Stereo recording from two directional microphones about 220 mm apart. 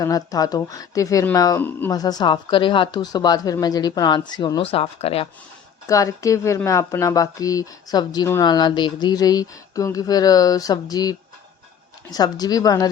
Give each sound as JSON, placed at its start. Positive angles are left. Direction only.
{"t": 0.0, "sound": "speech", "side_deg": 15}
{"t": 5.9, "sound": "speech", "side_deg": 15}